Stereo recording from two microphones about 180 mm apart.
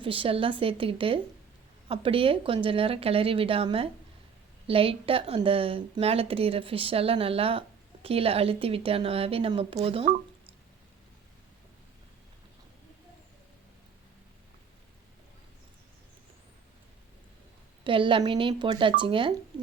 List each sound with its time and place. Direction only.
0.0 s speech: 30° right (ahead or behind)
17.8 s speech: 30° right (ahead or behind)